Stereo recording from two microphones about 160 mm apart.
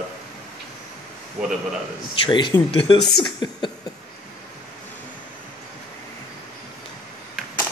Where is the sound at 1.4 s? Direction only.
5° right (ahead or behind).